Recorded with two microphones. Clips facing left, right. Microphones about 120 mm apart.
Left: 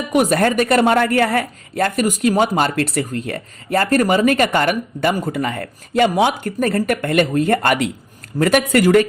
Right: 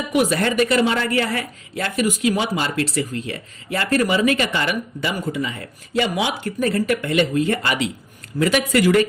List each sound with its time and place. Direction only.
0.1 s speech: 45° left (ahead or behind)